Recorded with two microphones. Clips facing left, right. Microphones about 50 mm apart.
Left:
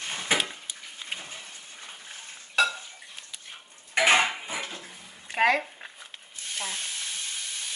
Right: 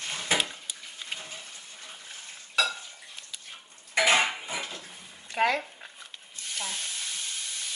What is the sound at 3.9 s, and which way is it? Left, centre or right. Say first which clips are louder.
Cutlery: left 2 dB; left.